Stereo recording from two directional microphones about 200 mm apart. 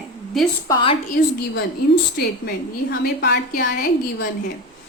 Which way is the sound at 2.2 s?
50° left (ahead or behind).